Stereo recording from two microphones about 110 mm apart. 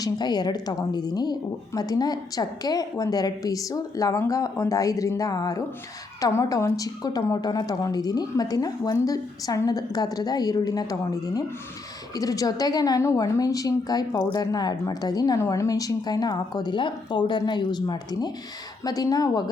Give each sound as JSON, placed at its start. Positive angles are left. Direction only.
{"t": 0.0, "sound": "a woman's voice", "side_deg": 40}